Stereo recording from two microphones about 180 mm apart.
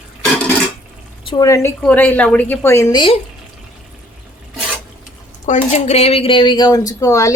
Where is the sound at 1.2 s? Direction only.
20° left (ahead or behind).